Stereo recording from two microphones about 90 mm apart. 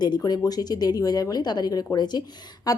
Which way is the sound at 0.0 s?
50° left (ahead or behind).